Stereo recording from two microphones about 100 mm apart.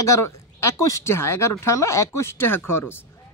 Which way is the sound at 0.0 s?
30° left (ahead or behind).